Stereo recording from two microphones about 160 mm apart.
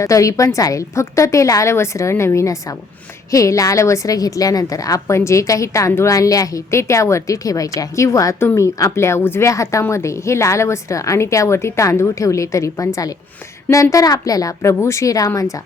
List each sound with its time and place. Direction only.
0.0 s a woman's voice: 20° left (ahead or behind)